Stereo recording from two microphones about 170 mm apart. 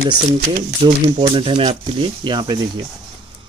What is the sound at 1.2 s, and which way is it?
Speech, 30° right (ahead or behind).